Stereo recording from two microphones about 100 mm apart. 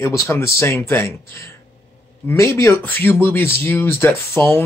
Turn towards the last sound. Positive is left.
turn(degrees=20)  # may be behind; listen again after turning